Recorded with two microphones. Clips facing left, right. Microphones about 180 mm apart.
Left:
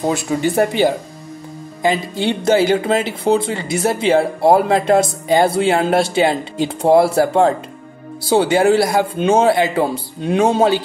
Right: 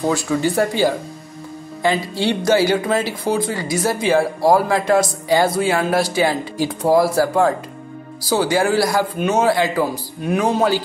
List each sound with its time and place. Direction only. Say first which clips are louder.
0.0 s speech: left 1 dB; 20° left (ahead or behind)